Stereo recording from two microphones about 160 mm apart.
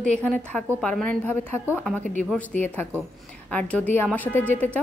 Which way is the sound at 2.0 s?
50° right (ahead or behind).